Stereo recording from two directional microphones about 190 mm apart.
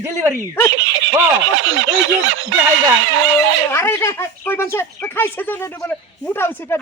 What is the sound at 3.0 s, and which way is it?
Snicker, 90° right.